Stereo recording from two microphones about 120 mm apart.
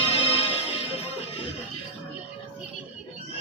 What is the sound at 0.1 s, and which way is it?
Music, 60° left (ahead or behind).